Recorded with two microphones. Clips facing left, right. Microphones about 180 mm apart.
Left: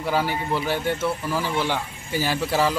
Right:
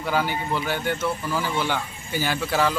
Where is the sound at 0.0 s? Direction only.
5° left (ahead or behind).